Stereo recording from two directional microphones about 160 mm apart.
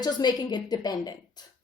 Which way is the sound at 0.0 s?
25° left (ahead or behind).